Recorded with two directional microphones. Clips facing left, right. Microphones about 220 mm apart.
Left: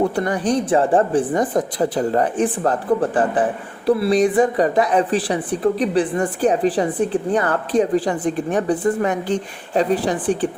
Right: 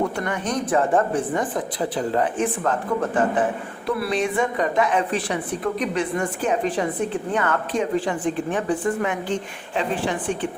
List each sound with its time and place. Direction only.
0.2 s a woman's voice: 35° left (ahead or behind)